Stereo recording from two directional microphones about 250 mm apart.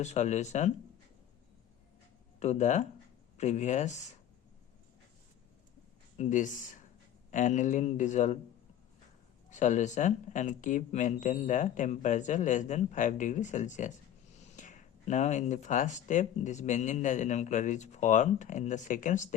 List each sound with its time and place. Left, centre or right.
0.0 s speech: left
2.4 s speech: left
6.1 s speech: left
9.5 s speech: left